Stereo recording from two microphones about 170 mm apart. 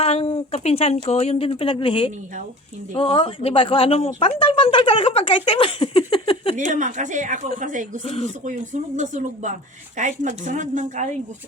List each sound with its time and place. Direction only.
0.0 s speech: 35° left (ahead or behind)
6.6 s speech: 50° right (ahead or behind)
8.0 s speech: 35° left (ahead or behind)
9.0 s speech: 45° right (ahead or behind)